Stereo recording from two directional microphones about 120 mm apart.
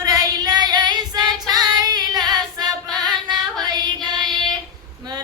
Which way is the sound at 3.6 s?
35° right (ahead or behind).